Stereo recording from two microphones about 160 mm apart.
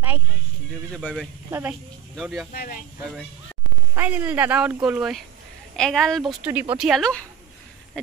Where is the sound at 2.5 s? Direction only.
60° left (ahead or behind).